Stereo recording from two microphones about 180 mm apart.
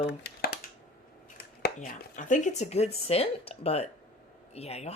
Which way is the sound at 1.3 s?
50° left (ahead or behind).